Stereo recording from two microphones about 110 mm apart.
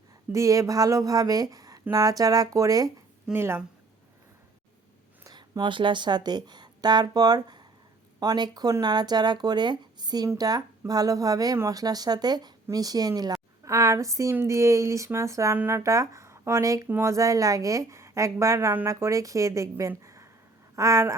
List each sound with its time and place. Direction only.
0.3 s speech: 30° right (ahead or behind)
3.3 s a woman's voice: 20° right (ahead or behind)
5.2 s a woman's voice: 40° right (ahead or behind)
19.9 s a sound: 25° right (ahead or behind)
20.7 s a woman's voice: 25° right (ahead or behind)